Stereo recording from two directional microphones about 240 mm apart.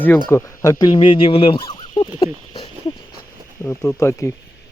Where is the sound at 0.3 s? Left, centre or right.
Centre.